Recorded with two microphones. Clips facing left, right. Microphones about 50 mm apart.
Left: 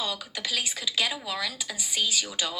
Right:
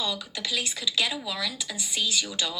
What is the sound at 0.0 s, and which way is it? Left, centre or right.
Speech, left.